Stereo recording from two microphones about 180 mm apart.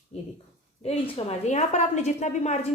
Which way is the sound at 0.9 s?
35° left (ahead or behind).